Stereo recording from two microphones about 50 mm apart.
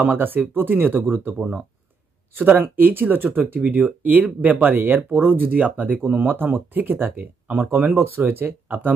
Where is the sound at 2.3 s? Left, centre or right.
Right.